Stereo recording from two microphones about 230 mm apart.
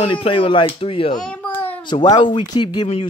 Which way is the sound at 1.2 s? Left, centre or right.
Centre.